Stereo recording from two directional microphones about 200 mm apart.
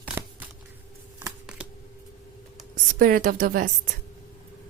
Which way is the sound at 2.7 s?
45° right (ahead or behind).